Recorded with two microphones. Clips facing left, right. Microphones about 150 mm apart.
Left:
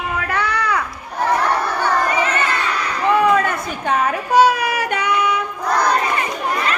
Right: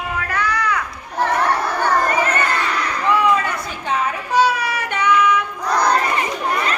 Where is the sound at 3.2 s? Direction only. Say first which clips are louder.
Left 2 dB; 50° left (ahead or behind); by 5.3 s 35° left (ahead or behind).